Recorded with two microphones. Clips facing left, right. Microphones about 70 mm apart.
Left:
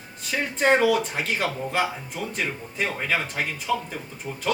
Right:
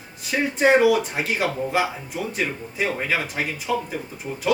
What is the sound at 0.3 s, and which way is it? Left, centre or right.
Speech, centre.